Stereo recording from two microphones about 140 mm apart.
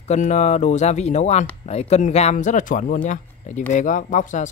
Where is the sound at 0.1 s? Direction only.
55° left (ahead or behind).